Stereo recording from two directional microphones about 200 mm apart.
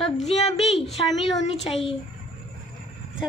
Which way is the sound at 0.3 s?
30° left (ahead or behind).